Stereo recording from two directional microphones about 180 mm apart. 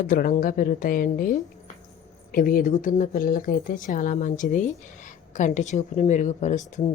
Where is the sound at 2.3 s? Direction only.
50° left (ahead or behind).